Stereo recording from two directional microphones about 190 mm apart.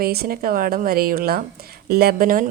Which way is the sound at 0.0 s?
55° right (ahead or behind).